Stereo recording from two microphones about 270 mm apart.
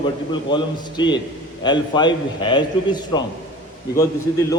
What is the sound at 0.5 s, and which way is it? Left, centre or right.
A man's voice, centre.